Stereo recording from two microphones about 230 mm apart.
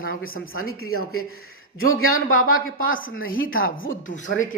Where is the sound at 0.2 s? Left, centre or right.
Left.